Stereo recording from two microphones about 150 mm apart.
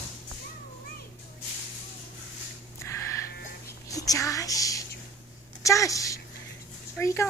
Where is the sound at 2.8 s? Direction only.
20° left (ahead or behind).